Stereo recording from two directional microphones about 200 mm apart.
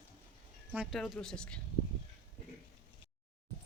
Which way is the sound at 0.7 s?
5° right (ahead or behind).